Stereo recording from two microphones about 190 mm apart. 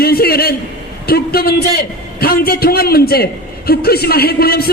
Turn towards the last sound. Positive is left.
turn(degrees=55)  # may be behind; listen again after turning